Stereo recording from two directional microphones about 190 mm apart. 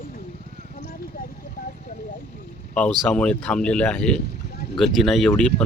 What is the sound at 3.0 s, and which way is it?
Speech, 5° left (ahead or behind).